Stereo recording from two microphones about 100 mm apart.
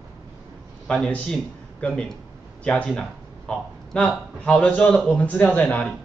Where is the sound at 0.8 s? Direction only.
10° left (ahead or behind).